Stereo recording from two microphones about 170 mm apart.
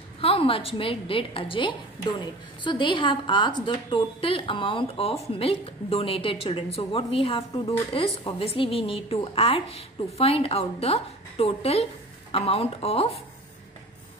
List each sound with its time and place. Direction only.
0.2 s a woman's voice: 35° left (ahead or behind)